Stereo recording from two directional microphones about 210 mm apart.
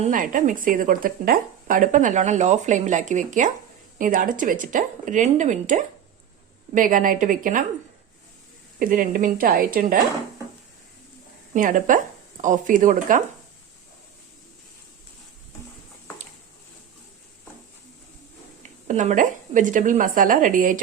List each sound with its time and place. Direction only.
0.0 s speech: 40° right (ahead or behind)
8.8 s speech: 40° right (ahead or behind)
11.5 s speech: 40° right (ahead or behind)
18.9 s speech: 35° right (ahead or behind)